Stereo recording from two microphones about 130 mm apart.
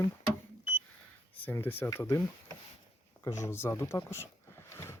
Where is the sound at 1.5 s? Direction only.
15° left (ahead or behind).